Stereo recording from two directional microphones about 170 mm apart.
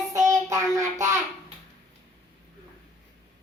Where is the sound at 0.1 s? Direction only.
20° right (ahead or behind).